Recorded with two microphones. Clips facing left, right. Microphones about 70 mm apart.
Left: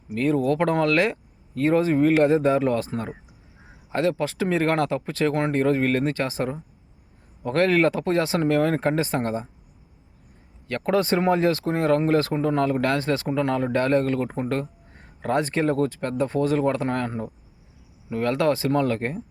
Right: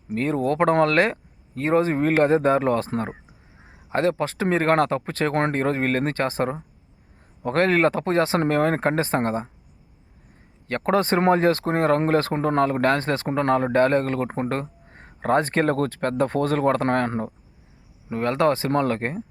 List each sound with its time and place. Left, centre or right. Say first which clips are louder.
0.1 s speech: left 1 dB; right
3.9 s speech: right 1 dB; right
10.7 s speech: right 1 dB; right
18.1 s speech: right 1 dB; right